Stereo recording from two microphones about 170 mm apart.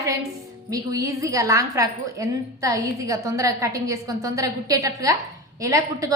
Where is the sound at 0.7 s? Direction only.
20° right (ahead or behind).